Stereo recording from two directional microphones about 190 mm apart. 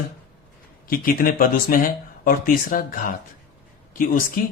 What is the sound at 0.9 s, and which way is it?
Speech, 50° left (ahead or behind).